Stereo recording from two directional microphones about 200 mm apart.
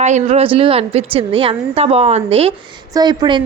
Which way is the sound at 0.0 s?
35° right (ahead or behind).